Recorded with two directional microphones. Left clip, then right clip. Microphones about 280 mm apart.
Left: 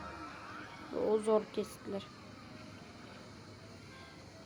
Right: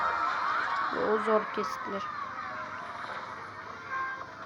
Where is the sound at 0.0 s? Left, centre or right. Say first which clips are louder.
Right 18 dB; right.